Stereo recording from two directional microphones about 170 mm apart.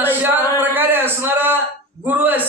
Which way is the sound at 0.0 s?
10° right (ahead or behind).